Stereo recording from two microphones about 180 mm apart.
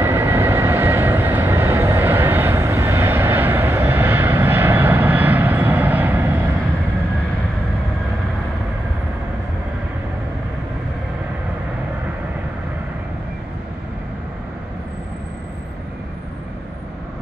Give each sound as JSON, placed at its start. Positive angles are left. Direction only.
{"t": 0.0, "sound": "vehicle", "side_deg": -15}